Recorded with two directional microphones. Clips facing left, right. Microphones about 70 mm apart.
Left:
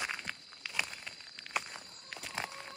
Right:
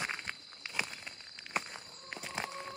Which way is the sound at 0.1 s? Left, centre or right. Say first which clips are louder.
Even; centre.